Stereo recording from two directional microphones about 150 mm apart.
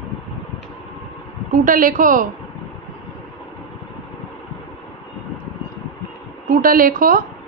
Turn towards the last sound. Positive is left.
turn(degrees=-65)  # may be behind; listen again after turning